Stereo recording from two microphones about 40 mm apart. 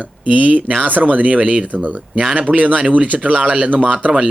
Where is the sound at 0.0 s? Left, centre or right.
Right.